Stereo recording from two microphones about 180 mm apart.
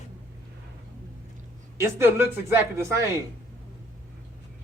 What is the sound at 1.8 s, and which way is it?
Speech, 15° right (ahead or behind).